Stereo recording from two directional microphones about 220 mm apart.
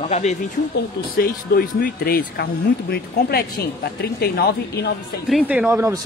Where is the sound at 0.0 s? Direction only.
30° left (ahead or behind).